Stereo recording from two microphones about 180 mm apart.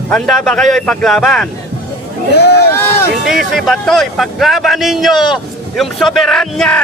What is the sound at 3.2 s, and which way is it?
A man's voice, centre (ahead or behind).